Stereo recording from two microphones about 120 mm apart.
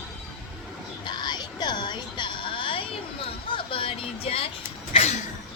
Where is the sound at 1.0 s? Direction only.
40° left (ahead or behind).